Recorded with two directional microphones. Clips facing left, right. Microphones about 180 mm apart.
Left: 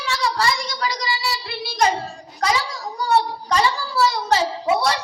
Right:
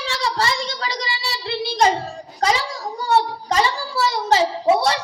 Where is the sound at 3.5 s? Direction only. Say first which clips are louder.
Even; 20° right (ahead or behind).